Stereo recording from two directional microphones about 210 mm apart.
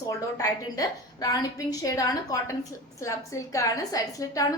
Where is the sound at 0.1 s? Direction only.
15° left (ahead or behind).